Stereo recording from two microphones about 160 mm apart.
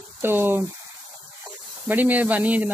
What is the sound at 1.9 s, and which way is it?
Speech, 10° right (ahead or behind).